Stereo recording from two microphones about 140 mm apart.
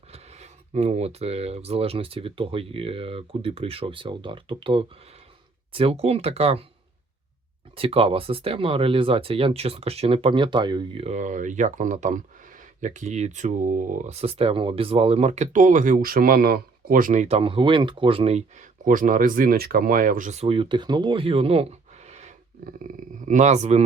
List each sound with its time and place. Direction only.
0.1 s speech: 50° right (ahead or behind)
7.8 s speech: 40° right (ahead or behind)